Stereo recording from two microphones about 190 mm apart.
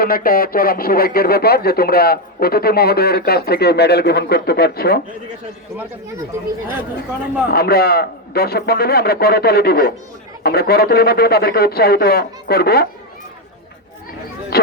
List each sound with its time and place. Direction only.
0.0 s speech: 50° left (ahead or behind)
7.5 s speech: 55° left (ahead or behind)
14.5 s a sound: 55° left (ahead or behind)